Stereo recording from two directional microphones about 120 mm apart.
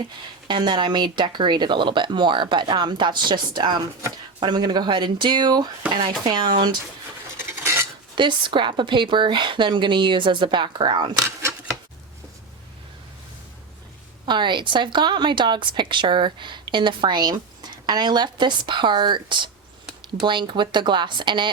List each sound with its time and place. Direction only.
0.0 s a woman's voice: 40° right (ahead or behind)
8.1 s a woman's voice: 40° right (ahead or behind)
14.3 s a woman's voice: 40° right (ahead or behind)